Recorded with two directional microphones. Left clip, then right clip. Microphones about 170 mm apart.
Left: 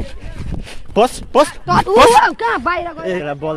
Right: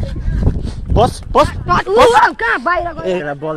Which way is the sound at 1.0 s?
35° left (ahead or behind).